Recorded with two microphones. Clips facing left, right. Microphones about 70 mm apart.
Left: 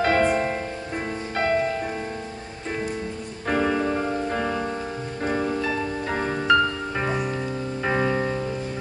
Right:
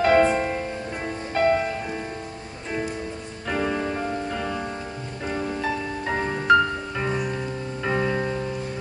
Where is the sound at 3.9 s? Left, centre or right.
Centre.